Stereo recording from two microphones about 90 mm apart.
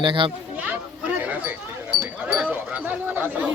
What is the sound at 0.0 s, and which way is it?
Speech, 65° right (ahead or behind).